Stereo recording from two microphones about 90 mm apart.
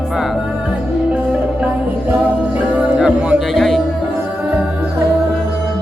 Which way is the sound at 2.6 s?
15° right (ahead or behind).